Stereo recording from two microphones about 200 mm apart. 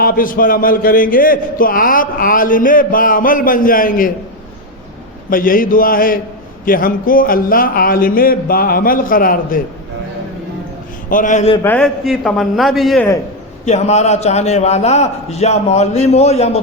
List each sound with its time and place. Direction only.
0.0 s a man's voice: 45° left (ahead or behind)
5.3 s a man's voice: 45° left (ahead or behind)
11.1 s a man's voice: 40° left (ahead or behind)
11.6 s a man's voice: 5° left (ahead or behind)
13.7 s a man's voice: 35° left (ahead or behind)